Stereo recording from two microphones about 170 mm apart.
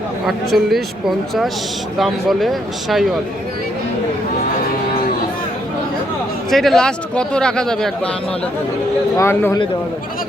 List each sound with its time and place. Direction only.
0.3 s speech: centre (ahead or behind)
6.5 s speech: centre (ahead or behind)
9.1 s speech: 15° left (ahead or behind)